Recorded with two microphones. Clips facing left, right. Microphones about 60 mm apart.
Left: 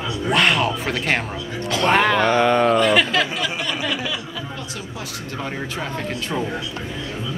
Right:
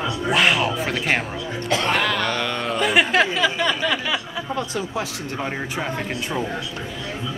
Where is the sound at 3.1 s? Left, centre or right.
Right.